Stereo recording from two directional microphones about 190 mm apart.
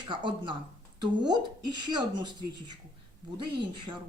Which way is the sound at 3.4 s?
25° right (ahead or behind).